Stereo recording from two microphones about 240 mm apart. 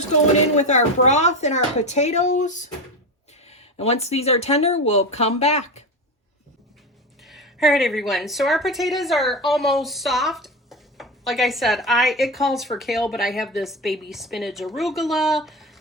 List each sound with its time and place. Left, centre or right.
0.1 s speech: left
7.2 s a woman's voice: centre